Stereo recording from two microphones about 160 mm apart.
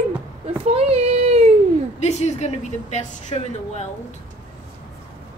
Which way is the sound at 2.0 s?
45° left (ahead or behind).